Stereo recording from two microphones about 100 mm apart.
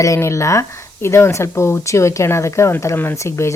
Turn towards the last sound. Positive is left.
turn(degrees=25)  # may be behind; listen again after turning